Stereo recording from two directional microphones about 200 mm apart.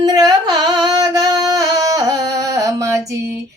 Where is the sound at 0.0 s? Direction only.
20° right (ahead or behind).